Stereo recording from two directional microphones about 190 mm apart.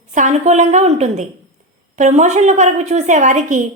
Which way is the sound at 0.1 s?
40° right (ahead or behind).